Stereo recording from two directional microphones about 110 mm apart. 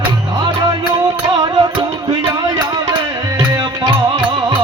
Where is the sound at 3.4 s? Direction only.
40° right (ahead or behind).